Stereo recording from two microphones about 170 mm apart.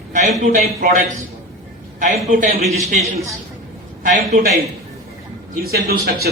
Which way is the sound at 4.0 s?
50° right (ahead or behind).